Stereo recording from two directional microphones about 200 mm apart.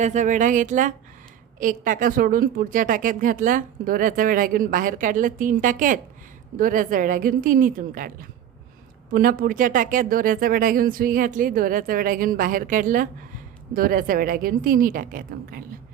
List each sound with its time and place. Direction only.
0.0 s speech: 35° right (ahead or behind)